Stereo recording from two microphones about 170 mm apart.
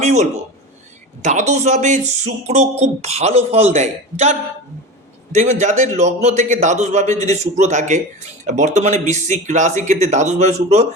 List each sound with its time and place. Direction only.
0.0 s a man's voice: 40° right (ahead or behind)